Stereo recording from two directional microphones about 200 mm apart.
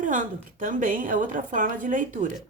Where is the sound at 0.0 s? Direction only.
40° right (ahead or behind).